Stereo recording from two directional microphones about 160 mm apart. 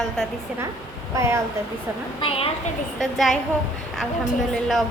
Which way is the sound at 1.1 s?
15° right (ahead or behind).